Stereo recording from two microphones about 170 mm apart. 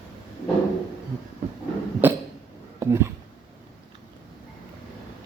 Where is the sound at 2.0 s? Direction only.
10° right (ahead or behind).